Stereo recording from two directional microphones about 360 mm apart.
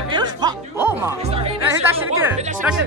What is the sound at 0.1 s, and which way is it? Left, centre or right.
Music, centre.